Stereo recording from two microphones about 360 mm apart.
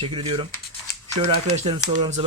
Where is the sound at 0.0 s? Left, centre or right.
Centre.